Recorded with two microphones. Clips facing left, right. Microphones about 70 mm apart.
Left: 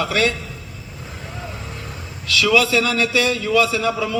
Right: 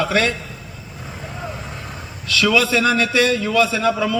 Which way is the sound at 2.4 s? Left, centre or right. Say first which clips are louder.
Even; right.